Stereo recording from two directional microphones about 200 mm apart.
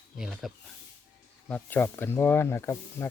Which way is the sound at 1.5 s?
10° left (ahead or behind).